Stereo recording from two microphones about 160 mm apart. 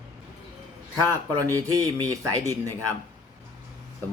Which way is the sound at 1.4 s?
20° right (ahead or behind).